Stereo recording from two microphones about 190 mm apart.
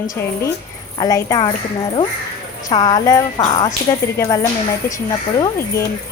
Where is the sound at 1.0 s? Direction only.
20° left (ahead or behind).